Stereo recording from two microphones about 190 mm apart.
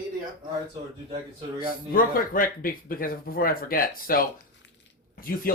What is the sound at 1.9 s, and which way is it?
Speech, 45° left (ahead or behind).